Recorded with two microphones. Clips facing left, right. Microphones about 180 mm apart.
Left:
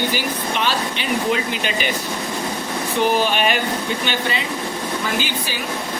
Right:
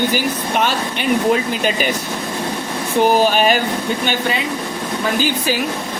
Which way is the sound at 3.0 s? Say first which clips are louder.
Right 5 dB; 40° right (ahead or behind).